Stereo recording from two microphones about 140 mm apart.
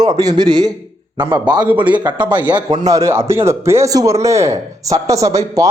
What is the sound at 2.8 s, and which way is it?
A man's voice, 20° right (ahead or behind).